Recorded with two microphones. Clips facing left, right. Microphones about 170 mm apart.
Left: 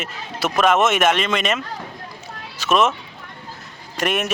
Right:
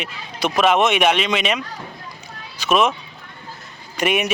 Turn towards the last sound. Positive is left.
turn(degrees=0)  # may be behind; listen again after turning